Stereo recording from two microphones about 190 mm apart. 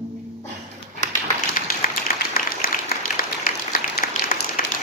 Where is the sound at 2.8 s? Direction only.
50° left (ahead or behind).